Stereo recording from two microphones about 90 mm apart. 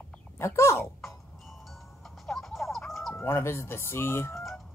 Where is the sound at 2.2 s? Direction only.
5° left (ahead or behind).